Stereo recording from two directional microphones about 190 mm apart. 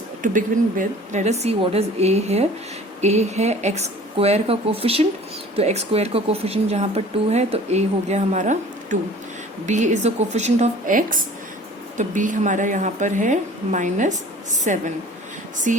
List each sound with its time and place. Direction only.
0.2 s a woman's voice: 45° right (ahead or behind)